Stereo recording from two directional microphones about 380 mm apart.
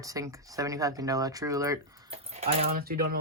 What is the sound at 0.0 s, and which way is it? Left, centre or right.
Speech, centre.